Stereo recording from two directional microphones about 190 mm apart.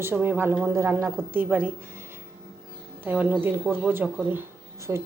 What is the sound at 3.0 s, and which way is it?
Speech, 10° right (ahead or behind).